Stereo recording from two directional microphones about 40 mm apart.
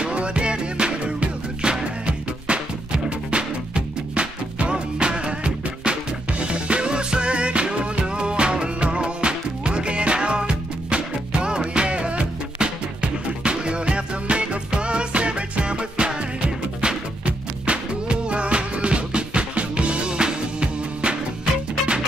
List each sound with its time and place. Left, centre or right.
0.0 s music: right